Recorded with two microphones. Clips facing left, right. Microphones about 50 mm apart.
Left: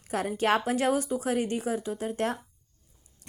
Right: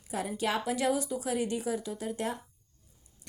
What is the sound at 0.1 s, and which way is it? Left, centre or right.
A woman's voice, left.